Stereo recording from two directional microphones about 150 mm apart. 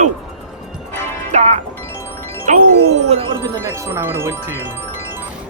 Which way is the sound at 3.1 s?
40° right (ahead or behind).